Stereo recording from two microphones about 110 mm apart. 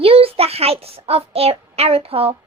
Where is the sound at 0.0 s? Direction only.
60° right (ahead or behind).